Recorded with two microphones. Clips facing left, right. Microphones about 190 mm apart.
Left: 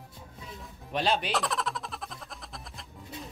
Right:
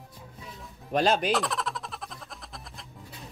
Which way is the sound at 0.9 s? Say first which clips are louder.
Right 4 dB; 45° right (ahead or behind).